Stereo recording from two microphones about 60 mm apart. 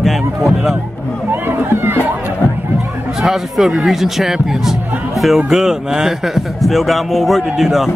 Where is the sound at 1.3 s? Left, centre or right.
Right.